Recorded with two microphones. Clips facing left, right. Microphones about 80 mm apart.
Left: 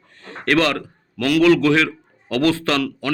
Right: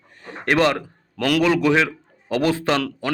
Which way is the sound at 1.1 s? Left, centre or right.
Right.